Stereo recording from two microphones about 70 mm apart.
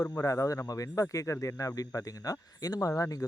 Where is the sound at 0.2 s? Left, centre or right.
Left.